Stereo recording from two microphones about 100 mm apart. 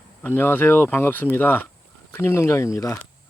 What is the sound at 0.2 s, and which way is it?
Speech, 20° left (ahead or behind).